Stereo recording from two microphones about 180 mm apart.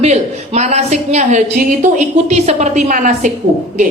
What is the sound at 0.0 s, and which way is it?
A woman's voice, 35° right (ahead or behind).